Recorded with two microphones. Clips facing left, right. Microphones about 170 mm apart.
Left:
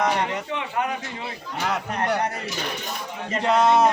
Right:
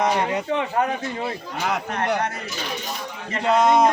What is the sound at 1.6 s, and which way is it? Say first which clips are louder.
Speech: right 1 dB; 10° right (ahead or behind).